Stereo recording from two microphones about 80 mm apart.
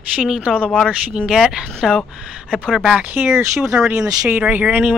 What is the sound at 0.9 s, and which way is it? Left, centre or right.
Speech, centre.